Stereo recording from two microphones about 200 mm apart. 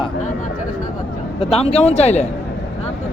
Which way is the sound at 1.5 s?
30° left (ahead or behind).